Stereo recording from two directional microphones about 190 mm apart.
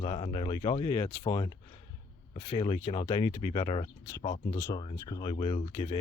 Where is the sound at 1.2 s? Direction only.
25° left (ahead or behind).